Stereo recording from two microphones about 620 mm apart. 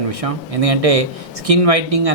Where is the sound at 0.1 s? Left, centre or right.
Right.